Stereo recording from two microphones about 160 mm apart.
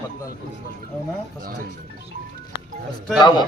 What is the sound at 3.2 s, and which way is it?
Speech, 25° left (ahead or behind).